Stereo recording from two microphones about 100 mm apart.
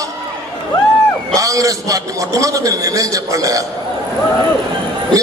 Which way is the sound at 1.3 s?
35° right (ahead or behind).